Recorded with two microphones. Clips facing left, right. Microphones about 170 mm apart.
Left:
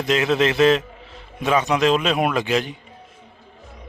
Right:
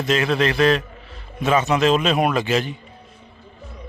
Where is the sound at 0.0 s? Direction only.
15° left (ahead or behind).